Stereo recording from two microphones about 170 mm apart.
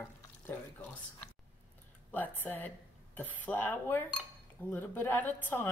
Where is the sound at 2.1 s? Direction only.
10° left (ahead or behind).